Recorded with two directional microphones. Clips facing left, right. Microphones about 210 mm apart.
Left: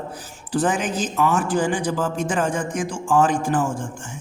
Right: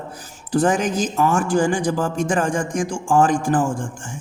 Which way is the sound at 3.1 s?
45° right (ahead or behind).